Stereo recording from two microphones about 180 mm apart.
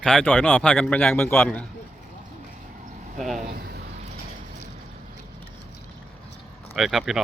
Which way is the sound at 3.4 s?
60° right (ahead or behind).